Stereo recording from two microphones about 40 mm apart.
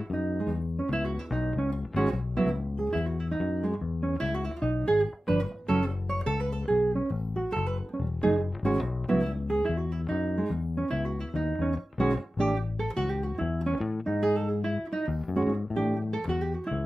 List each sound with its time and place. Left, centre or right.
0.1 s guitar: centre
0.9 s music: centre
2.9 s guitar: centre
5.0 s music: centre
10.8 s guitar: centre
12.0 s music: centre
14.0 s guitar: centre